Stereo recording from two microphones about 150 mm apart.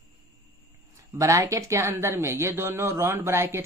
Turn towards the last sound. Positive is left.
turn(degrees=-15)  # may be behind; listen again after turning